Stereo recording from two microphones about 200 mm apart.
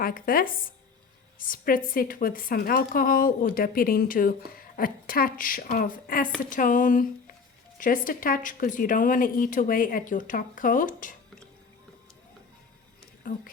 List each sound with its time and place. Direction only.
0.0 s a woman's voice: 45° left (ahead or behind)
13.2 s speech: 45° left (ahead or behind)